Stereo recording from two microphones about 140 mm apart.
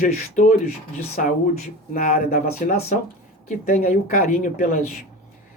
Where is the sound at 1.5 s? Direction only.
80° left.